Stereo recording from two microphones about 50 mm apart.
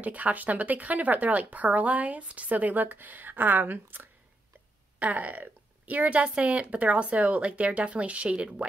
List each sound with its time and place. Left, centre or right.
0.0 s speech: right
4.9 s a woman's voice: right